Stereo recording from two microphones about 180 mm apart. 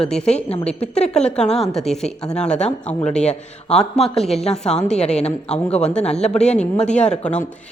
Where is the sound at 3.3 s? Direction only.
35° left (ahead or behind).